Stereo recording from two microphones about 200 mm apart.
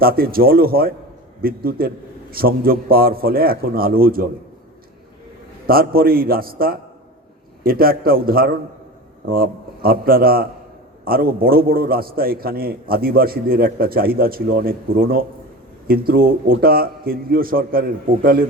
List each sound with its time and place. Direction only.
0.0 s a man's voice: 50° right (ahead or behind)
5.6 s a man's voice: 50° right (ahead or behind)